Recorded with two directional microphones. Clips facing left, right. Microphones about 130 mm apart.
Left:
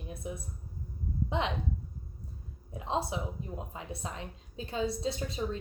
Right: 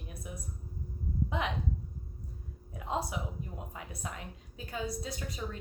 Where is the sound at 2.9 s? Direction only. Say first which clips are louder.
Left 2 dB; 25° left (ahead or behind).